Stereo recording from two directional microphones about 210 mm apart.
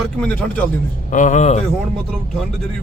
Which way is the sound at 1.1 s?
35° left (ahead or behind).